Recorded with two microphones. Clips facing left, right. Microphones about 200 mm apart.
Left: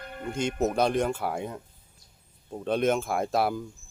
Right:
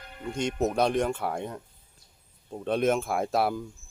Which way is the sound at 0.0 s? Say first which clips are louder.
Left 5 dB; 55° left (ahead or behind).